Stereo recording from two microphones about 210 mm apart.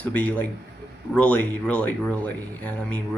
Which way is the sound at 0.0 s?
5° left (ahead or behind).